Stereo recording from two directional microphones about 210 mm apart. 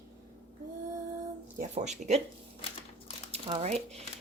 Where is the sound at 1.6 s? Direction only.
35° right (ahead or behind).